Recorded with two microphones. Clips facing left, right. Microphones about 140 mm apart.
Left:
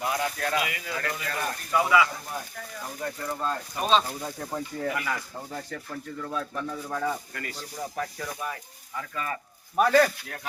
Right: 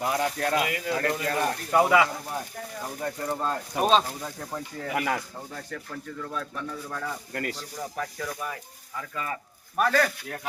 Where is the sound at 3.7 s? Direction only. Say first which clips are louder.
Right 8 dB; 75° right (ahead or behind).